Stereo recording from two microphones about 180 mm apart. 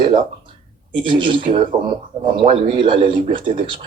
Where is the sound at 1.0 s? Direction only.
30° right (ahead or behind).